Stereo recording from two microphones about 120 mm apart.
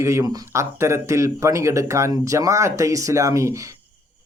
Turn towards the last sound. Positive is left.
turn(degrees=-25)  # may be behind; listen again after turning